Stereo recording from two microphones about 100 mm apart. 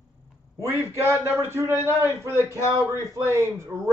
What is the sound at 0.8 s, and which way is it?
A man's voice, 25° right (ahead or behind).